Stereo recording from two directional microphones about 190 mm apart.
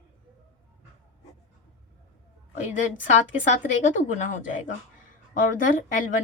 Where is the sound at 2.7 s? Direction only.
40° left (ahead or behind).